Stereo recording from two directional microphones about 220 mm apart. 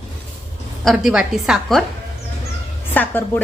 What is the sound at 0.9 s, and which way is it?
Speech, centre (ahead or behind).